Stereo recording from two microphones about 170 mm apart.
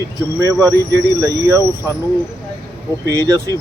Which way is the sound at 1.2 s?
15° right (ahead or behind).